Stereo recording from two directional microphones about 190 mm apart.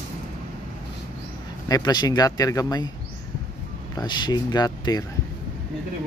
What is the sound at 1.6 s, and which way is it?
Speech, 20° left (ahead or behind).